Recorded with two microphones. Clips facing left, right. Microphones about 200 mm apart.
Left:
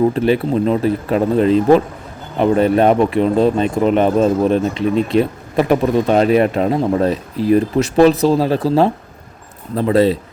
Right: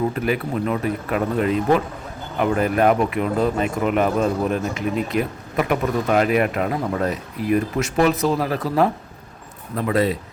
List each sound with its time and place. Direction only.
0.1 s speech: 30° left (ahead or behind)